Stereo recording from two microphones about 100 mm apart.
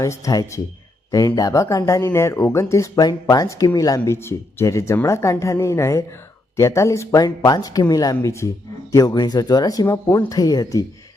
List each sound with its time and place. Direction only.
0.0 s speech: 35° left (ahead or behind)